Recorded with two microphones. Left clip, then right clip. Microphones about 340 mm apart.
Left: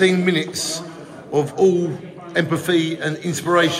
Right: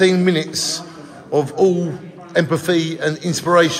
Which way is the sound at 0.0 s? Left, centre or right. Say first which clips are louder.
Right 2 dB; right.